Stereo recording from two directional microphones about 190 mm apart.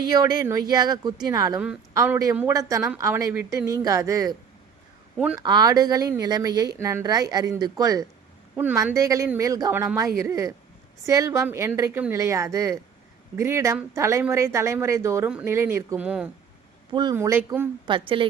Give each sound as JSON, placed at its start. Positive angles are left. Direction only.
{"t": 0.1, "sound": "speech", "side_deg": -20}
{"t": 5.1, "sound": "speech", "side_deg": -5}
{"t": 5.4, "sound": "speech", "side_deg": -20}
{"t": 16.9, "sound": "speech", "side_deg": -20}
{"t": 17.8, "sound": "speech", "side_deg": -25}